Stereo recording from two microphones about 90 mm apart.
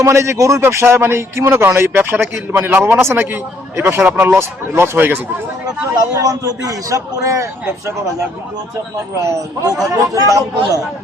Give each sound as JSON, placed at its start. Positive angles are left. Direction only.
{"t": 0.0, "sound": "speech", "side_deg": -35}
{"t": 6.1, "sound": "a man's voice", "side_deg": -40}
{"t": 9.2, "sound": "a man's voice", "side_deg": -40}